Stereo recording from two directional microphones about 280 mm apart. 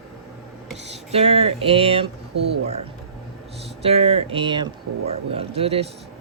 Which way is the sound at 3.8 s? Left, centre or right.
Right.